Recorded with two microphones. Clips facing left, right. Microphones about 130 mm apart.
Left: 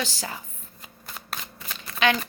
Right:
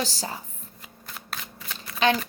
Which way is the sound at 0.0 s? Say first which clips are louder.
Right 1 dB; 35° right (ahead or behind).